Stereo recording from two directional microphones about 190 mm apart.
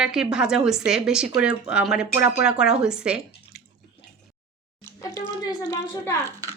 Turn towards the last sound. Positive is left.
turn(degrees=15)  # may be behind; listen again after turning